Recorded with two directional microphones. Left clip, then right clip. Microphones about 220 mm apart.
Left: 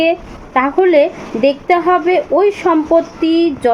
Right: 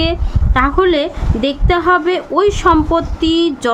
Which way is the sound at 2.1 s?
15° right (ahead or behind).